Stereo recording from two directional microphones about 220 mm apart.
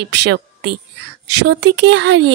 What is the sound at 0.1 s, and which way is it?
A woman's voice, 55° right (ahead or behind).